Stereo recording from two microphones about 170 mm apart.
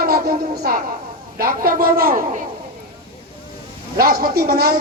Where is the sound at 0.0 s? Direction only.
60° right (ahead or behind).